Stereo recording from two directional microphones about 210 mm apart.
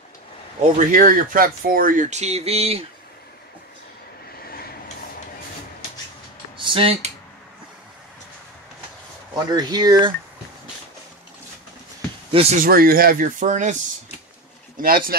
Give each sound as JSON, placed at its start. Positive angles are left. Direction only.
{"t": 0.7, "sound": "speech", "side_deg": -40}
{"t": 6.6, "sound": "speech", "side_deg": -25}
{"t": 9.3, "sound": "speech", "side_deg": -20}
{"t": 12.3, "sound": "speech", "side_deg": -25}
{"t": 12.5, "sound": "speech", "side_deg": -45}
{"t": 14.8, "sound": "speech", "side_deg": -45}